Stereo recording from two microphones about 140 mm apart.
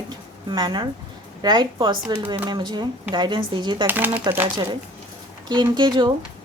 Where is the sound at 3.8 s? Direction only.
15° right (ahead or behind).